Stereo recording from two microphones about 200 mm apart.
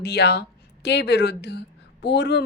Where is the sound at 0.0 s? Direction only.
55° left (ahead or behind).